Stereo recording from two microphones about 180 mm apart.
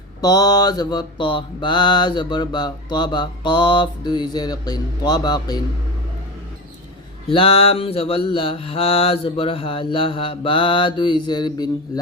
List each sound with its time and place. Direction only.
0.2 s mantra: 20° left (ahead or behind)
7.3 s mantra: 30° left (ahead or behind)